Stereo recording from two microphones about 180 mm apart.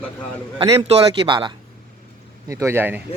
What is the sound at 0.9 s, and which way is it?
Speech, 30° right (ahead or behind).